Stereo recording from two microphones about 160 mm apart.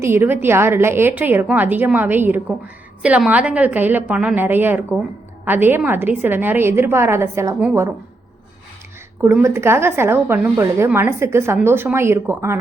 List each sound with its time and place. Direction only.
0.0 s a woman's voice: 15° right (ahead or behind)
9.2 s a woman's voice: 15° right (ahead or behind)